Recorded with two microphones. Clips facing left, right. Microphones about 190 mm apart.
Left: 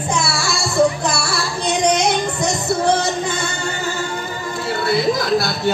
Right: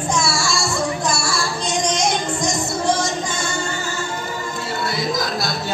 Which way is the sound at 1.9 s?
60° left (ahead or behind).